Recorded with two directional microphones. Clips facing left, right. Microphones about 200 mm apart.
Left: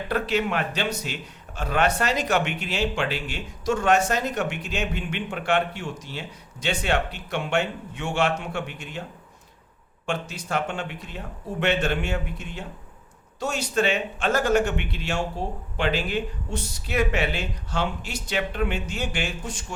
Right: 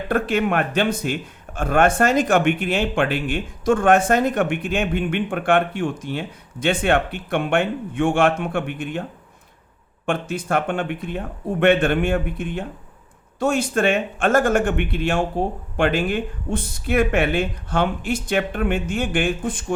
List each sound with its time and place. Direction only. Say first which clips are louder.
0.1 s speech: right 5 dB; 50° right (ahead or behind)
10.1 s speech: right 6 dB; 55° right (ahead or behind)